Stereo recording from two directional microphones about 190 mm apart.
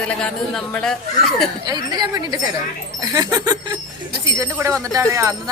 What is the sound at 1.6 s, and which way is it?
A woman's voice, 20° right (ahead or behind).